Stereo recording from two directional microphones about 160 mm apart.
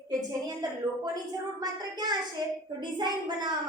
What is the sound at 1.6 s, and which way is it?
A woman's voice, 25° right (ahead or behind).